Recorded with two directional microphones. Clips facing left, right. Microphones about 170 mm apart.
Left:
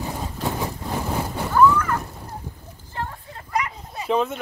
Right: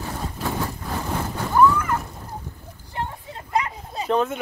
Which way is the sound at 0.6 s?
10° left (ahead or behind).